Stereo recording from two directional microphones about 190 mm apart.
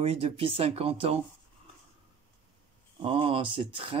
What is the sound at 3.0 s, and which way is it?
Speech, 30° right (ahead or behind).